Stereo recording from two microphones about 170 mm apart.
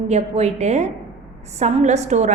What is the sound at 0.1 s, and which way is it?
A woman's voice, 40° right (ahead or behind).